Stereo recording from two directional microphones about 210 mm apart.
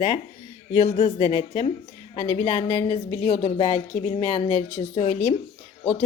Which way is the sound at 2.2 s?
30° left (ahead or behind).